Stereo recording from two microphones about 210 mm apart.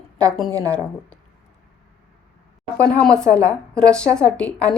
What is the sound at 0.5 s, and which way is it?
Speech, 15° right (ahead or behind).